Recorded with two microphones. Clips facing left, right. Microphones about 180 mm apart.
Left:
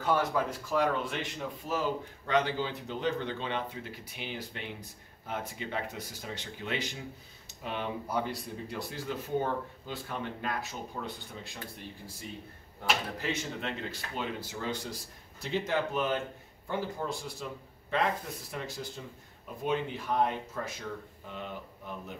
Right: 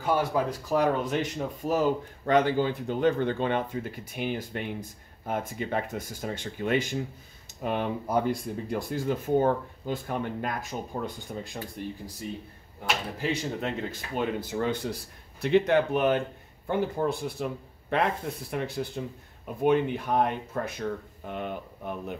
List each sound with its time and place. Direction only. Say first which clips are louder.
0.0 s speech: right 2 dB; 10° right (ahead or behind)
0.3 s speech: right 4 dB; 35° right (ahead or behind)
13.2 s a man's voice: right 5 dB; 35° right (ahead or behind); by 22.1 s 60° right (ahead or behind)